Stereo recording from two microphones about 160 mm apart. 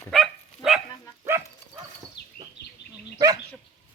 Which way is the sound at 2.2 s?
90° left.